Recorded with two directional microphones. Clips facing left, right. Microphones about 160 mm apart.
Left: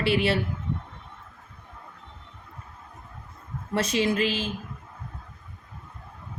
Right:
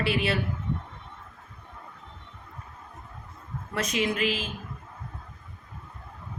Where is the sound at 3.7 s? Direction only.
30° left (ahead or behind).